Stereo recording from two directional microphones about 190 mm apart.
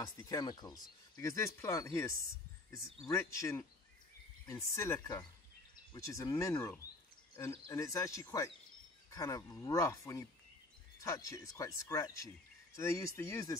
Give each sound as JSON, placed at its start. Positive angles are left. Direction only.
{"t": 0.0, "sound": "speech", "side_deg": 20}